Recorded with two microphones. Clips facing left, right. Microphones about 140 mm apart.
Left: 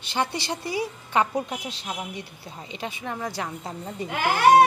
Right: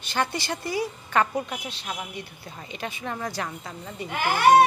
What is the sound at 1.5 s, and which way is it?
A woman's voice, 30° left (ahead or behind).